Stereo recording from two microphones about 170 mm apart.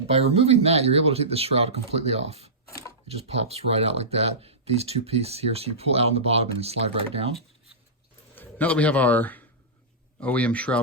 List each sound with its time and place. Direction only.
0.1 s speech: 35° right (ahead or behind)
8.4 s a man's voice: 10° left (ahead or behind)